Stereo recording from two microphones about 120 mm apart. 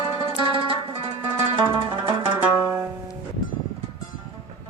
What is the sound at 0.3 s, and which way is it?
Music, 45° right (ahead or behind).